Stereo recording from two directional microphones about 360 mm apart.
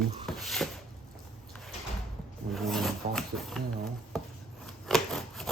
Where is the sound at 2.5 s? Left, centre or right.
Centre.